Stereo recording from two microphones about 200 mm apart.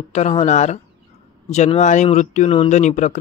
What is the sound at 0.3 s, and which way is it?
Speech, 30° left (ahead or behind).